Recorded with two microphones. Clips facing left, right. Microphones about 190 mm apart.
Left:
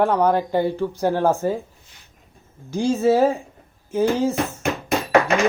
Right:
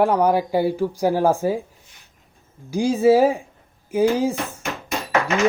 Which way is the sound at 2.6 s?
15° right (ahead or behind).